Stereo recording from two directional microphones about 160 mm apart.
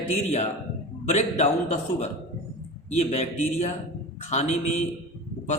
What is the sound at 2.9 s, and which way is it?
A man's voice, 45° left (ahead or behind).